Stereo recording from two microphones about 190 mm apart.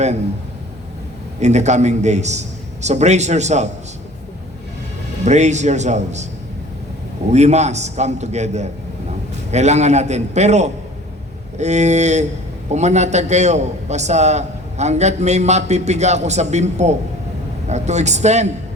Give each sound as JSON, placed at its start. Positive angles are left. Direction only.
{"t": 1.4, "sound": "a man's voice", "side_deg": -35}
{"t": 5.2, "sound": "a man's voice", "side_deg": -35}
{"t": 7.3, "sound": "a man's voice", "side_deg": -35}